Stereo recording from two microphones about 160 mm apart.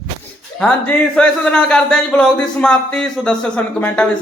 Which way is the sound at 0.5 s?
5° left (ahead or behind).